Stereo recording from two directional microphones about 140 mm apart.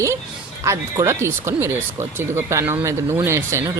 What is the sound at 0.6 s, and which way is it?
Speech, 20° right (ahead or behind).